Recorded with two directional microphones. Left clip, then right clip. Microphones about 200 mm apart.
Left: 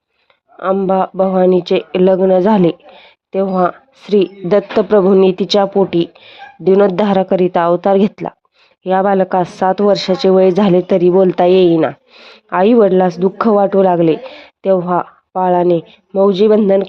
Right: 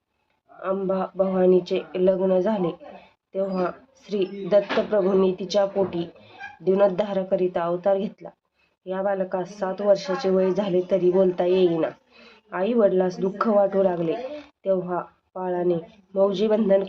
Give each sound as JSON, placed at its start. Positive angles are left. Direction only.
{"t": 0.6, "sound": "speech", "side_deg": 50}